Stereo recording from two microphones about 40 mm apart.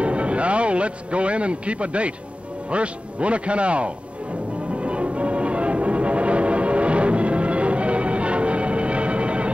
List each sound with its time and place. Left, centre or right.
0.0 s music: right
2.7 s a man's voice: right
4.7 s music: right